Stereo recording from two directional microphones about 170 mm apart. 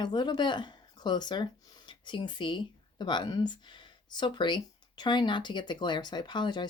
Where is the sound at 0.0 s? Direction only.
25° left (ahead or behind).